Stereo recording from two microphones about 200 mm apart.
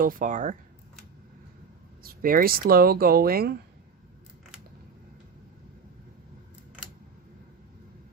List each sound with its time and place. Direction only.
0.0 s speech: 45° right (ahead or behind)
2.0 s speech: 45° right (ahead or behind)